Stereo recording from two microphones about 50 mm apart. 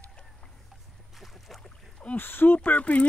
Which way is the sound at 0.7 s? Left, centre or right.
Centre.